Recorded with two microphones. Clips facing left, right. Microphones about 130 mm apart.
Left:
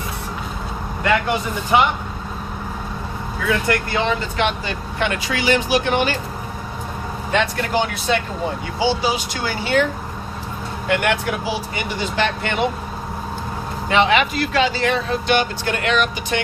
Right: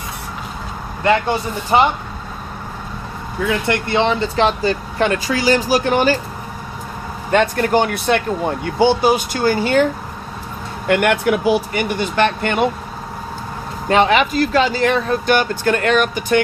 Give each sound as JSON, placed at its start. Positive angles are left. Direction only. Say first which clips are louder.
{"t": 1.0, "sound": "speech", "louder": "right 3 dB", "side_deg": -35}
{"t": 3.7, "sound": "speech", "louder": "right 3 dB", "side_deg": -25}
{"t": 7.3, "sound": "speech", "louder": "right 6 dB", "side_deg": -50}
{"t": 10.8, "sound": "speech", "louder": "right 5 dB", "side_deg": -50}
{"t": 13.9, "sound": "speech", "louder": "right 3 dB", "side_deg": -40}